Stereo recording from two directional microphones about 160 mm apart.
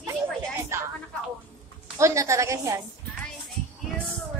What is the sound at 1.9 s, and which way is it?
Speech, 20° right (ahead or behind).